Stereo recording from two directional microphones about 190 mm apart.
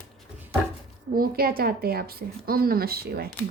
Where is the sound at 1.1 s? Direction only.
50° right (ahead or behind).